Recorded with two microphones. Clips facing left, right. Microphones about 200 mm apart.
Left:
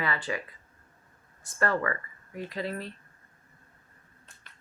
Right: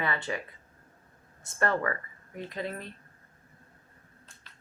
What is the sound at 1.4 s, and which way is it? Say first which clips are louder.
Speech: even; 20° right (ahead or behind).